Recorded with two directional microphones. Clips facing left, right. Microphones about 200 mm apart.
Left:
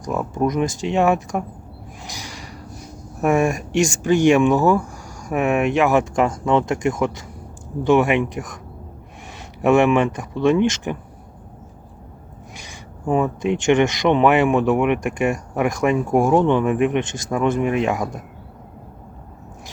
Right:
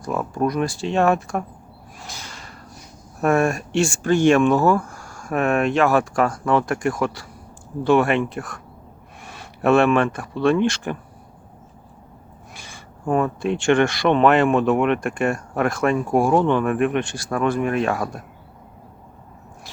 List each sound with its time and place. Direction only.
0.0 s speech: 15° left (ahead or behind)
2.0 s a sound: 15° left (ahead or behind)
3.2 s speech: 15° left (ahead or behind)
12.5 s speech: 15° left (ahead or behind)